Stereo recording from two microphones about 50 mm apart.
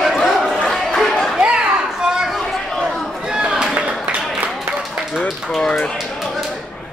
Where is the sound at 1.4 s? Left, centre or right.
Centre.